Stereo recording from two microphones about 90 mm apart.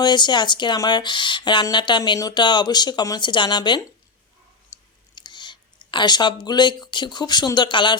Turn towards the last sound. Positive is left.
turn(degrees=60)  # may be behind; listen again after turning